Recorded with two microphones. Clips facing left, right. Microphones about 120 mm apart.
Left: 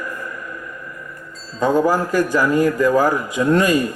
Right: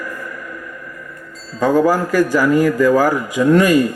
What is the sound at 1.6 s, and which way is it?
A man's voice, 20° left (ahead or behind).